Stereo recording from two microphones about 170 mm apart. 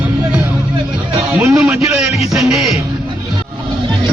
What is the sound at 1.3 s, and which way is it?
Speech, 10° right (ahead or behind).